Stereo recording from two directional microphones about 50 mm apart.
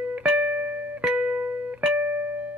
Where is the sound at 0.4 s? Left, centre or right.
Right.